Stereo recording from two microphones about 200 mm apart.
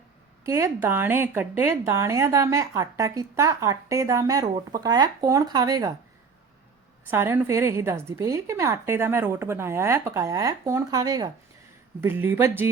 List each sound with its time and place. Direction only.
0.4 s a woman's voice: 15° right (ahead or behind)
7.1 s a woman's voice: 10° right (ahead or behind)